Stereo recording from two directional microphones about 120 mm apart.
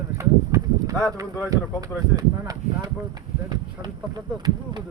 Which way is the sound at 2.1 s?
30° right (ahead or behind).